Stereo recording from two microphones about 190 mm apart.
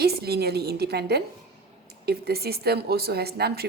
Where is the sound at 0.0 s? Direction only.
55° right (ahead or behind).